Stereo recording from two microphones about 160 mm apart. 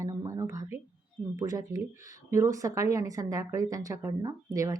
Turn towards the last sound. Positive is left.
turn(degrees=-20)  # may be behind; listen again after turning